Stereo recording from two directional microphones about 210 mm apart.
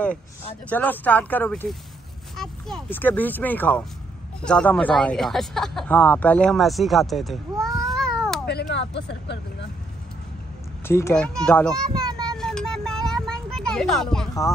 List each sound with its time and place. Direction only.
0.7 s speech: 10° left (ahead or behind)
8.5 s speech: 55° left (ahead or behind)
10.9 s speech: 15° left (ahead or behind)
12.4 s a sound: 5° left (ahead or behind)